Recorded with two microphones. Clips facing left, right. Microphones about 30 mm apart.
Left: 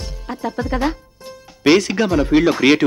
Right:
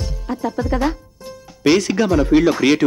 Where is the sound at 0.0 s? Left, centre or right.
Left.